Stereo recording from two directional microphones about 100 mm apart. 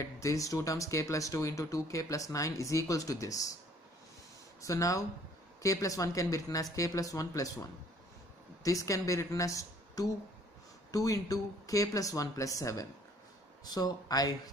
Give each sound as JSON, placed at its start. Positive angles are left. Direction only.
{"t": 0.0, "sound": "speech", "side_deg": 30}
{"t": 4.6, "sound": "speech", "side_deg": 30}
{"t": 8.6, "sound": "speech", "side_deg": 35}